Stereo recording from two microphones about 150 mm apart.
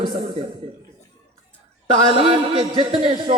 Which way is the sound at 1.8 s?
35° right (ahead or behind).